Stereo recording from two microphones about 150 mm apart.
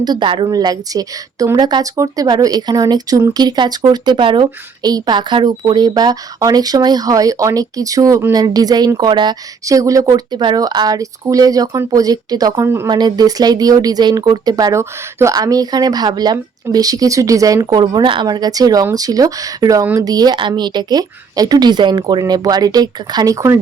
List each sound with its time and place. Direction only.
0.0 s a woman's voice: 30° right (ahead or behind)
12.9 s a woman's voice: 30° right (ahead or behind)